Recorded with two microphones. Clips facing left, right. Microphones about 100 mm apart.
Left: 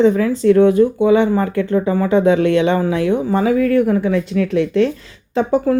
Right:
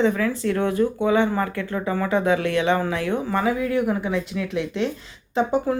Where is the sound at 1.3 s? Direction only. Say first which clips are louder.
Left 8 dB; 40° left (ahead or behind).